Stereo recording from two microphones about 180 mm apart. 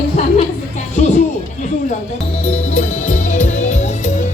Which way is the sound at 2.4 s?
35° left (ahead or behind).